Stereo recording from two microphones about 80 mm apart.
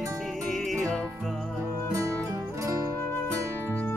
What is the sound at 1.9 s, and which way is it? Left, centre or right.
Music, right.